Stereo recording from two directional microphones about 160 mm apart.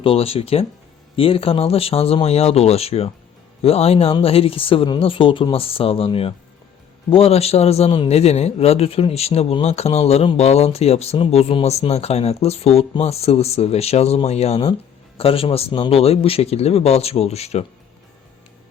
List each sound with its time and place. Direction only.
0.0 s a man's voice: 35° left (ahead or behind)